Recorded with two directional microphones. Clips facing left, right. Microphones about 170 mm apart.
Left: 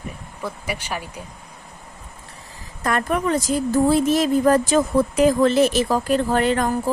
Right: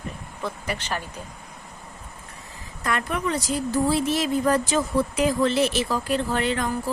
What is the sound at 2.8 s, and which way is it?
A woman's voice, 45° left (ahead or behind).